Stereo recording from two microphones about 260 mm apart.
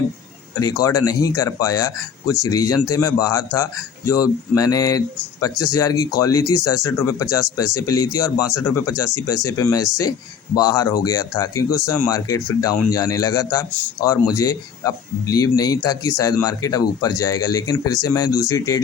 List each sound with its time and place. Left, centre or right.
0.6 s speech: centre